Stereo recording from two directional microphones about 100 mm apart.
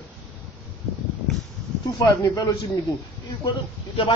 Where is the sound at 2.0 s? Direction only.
40° left (ahead or behind).